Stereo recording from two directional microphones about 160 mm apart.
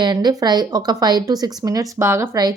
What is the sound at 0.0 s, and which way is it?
Speech, 25° right (ahead or behind).